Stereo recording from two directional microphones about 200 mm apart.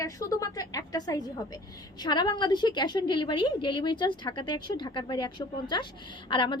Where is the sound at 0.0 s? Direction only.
15° left (ahead or behind).